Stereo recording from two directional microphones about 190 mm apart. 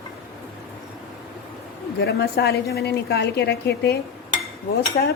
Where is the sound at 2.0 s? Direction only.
60° left (ahead or behind).